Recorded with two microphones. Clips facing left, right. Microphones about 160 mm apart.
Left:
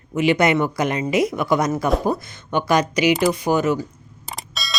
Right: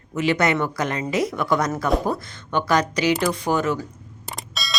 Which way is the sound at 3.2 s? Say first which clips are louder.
Left 3 dB; 10° left (ahead or behind).